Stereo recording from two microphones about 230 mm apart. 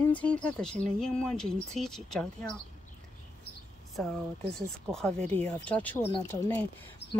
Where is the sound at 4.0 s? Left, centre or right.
Centre.